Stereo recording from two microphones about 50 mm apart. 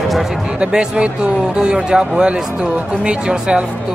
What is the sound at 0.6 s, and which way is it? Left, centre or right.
Speech, right.